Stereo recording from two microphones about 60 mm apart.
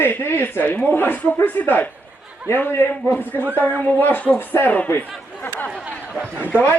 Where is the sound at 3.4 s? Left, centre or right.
Right.